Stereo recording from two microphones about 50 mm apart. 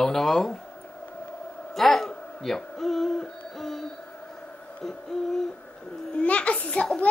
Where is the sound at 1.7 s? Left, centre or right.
Centre.